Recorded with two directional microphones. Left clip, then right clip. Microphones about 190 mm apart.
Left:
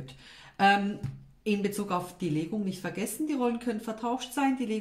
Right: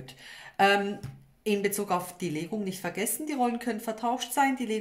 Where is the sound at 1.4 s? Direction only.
45° right (ahead or behind).